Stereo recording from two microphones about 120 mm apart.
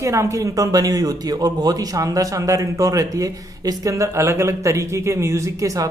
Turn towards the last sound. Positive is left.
turn(degrees=-25)  # may be behind; listen again after turning